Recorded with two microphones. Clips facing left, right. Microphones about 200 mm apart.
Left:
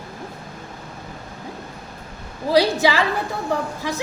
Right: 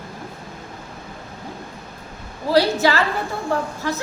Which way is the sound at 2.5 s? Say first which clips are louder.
Even; 15° left (ahead or behind).